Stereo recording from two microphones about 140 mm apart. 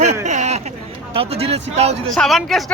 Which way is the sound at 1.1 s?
45° right (ahead or behind).